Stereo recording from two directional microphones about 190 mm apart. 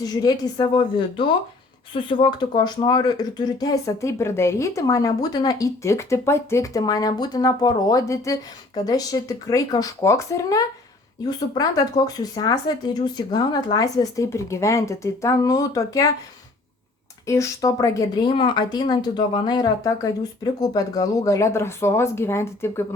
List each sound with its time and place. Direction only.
0.0 s speech: 20° left (ahead or behind)
17.2 s speech: 15° left (ahead or behind)